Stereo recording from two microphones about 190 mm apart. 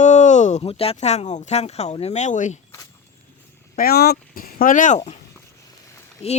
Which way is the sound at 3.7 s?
55° left (ahead or behind).